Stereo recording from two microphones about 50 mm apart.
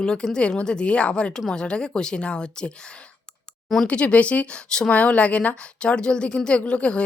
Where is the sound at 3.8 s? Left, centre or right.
Left.